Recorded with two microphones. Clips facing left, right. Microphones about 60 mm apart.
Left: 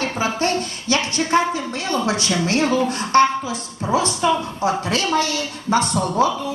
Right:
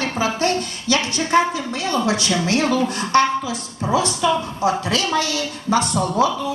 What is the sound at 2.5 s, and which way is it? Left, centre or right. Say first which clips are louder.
A woman's voice: left 1 dB; left.